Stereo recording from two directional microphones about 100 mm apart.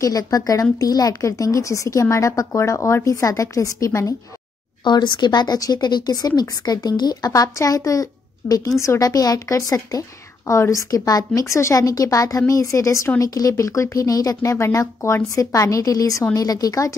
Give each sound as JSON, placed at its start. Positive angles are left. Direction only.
{"t": 0.0, "sound": "speech", "side_deg": 35}
{"t": 4.8, "sound": "speech", "side_deg": 50}